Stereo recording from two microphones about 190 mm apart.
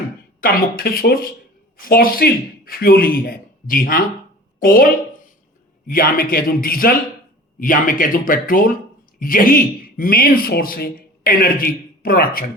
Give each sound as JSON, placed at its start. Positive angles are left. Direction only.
{"t": 0.4, "sound": "speech", "side_deg": 50}
{"t": 5.9, "sound": "speech", "side_deg": 50}